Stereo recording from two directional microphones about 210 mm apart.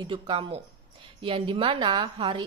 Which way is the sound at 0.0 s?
25° right (ahead or behind).